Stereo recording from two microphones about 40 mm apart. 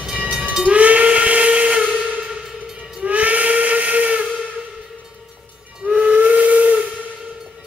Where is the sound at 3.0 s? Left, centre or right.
Right.